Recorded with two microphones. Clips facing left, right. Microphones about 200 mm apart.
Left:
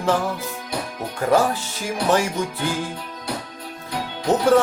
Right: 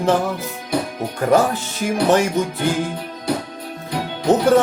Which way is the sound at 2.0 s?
20° right (ahead or behind).